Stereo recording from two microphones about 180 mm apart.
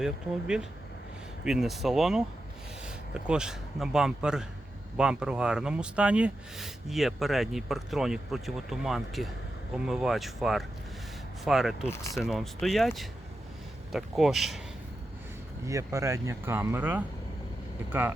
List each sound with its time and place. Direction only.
0.0 s speech: 5° right (ahead or behind)
15.6 s speech: 15° right (ahead or behind)